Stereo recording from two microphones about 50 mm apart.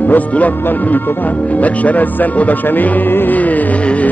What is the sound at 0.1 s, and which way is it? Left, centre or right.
Music, left.